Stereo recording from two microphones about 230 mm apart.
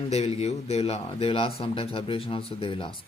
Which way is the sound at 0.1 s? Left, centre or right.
Left.